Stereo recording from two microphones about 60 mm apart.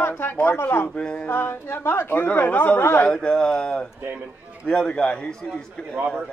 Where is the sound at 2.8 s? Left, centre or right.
Left.